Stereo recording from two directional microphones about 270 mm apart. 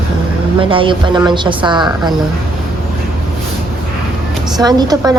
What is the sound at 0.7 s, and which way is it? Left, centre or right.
A woman's voice, centre.